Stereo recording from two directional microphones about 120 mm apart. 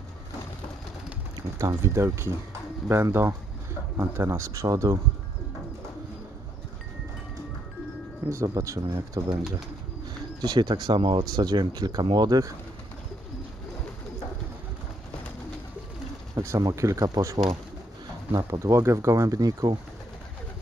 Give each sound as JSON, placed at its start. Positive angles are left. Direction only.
{"t": 1.6, "sound": "speech", "side_deg": -25}
{"t": 8.3, "sound": "speech", "side_deg": -25}
{"t": 10.4, "sound": "speech", "side_deg": -35}
{"t": 16.3, "sound": "speech", "side_deg": -25}